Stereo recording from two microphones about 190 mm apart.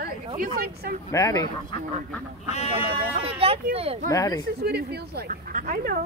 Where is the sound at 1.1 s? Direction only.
20° left (ahead or behind).